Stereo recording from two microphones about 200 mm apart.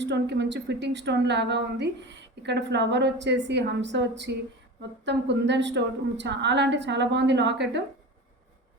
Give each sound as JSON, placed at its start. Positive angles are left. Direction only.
{"t": 0.0, "sound": "a woman's voice", "side_deg": -60}